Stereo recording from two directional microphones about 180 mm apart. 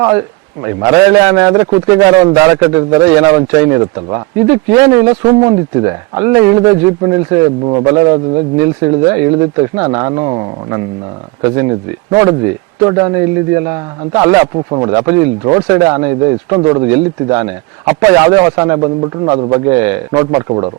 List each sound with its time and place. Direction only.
0.6 s a man's voice: 20° right (ahead or behind)
16.8 s speech: 15° right (ahead or behind)
19.7 s speech: 15° right (ahead or behind)